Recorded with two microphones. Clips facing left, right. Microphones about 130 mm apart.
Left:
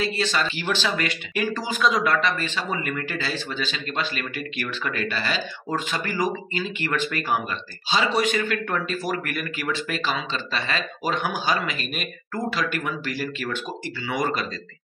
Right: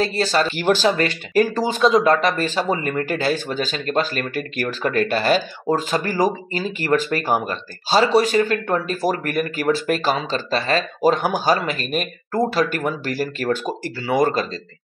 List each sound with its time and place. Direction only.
0.0 s speech: 40° right (ahead or behind)
2.1 s speech: 40° right (ahead or behind)
5.7 s speech: 35° right (ahead or behind)